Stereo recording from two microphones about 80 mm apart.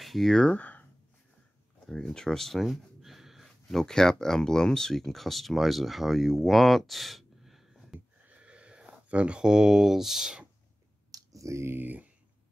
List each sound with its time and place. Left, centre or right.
0.0 s speech: centre; by 0.8 s left
1.9 s speech: centre
8.3 s speech: centre
11.1 s a sound: right